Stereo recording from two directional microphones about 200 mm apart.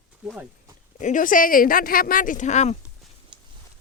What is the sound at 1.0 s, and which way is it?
Speech, 40° left (ahead or behind).